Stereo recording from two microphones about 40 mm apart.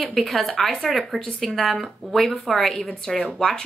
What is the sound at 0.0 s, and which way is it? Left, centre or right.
Speech, centre.